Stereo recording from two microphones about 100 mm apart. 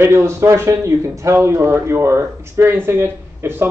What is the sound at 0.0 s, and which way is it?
Speech, 25° right (ahead or behind).